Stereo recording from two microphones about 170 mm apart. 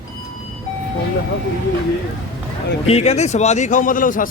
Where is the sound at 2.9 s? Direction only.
40° left (ahead or behind).